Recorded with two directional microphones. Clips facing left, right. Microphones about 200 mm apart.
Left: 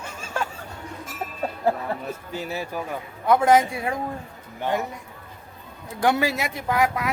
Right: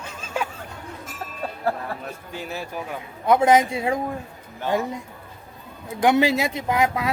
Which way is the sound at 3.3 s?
20° right (ahead or behind).